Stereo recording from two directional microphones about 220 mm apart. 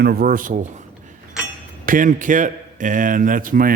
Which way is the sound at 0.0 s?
45° right (ahead or behind).